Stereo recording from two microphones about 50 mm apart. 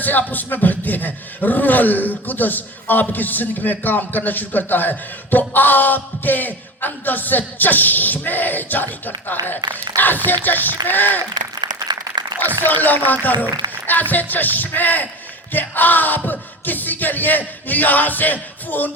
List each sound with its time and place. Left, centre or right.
0.0 s a man's voice: left
12.4 s a man's voice: left